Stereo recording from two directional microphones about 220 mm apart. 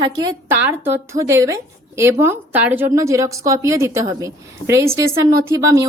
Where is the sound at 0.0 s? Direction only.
15° right (ahead or behind).